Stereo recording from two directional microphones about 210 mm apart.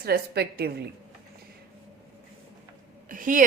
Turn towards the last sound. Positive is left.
turn(degrees=-40)  # may be behind; listen again after turning